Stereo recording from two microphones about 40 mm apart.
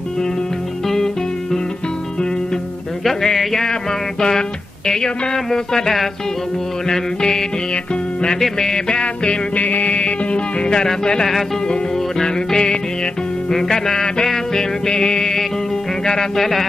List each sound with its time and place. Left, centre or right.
0.8 s music: centre
3.0 s music: centre
4.2 s speech: centre
6.9 s music: centre
16.1 s speech: centre